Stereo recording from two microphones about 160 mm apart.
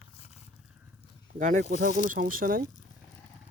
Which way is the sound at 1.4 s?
50° right (ahead or behind).